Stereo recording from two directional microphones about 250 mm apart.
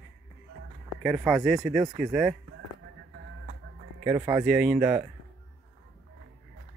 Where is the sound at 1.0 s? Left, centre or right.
Centre.